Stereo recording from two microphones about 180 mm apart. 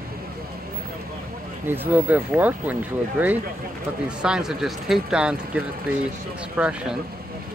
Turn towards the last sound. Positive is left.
turn(degrees=-5)  # may be behind; listen again after turning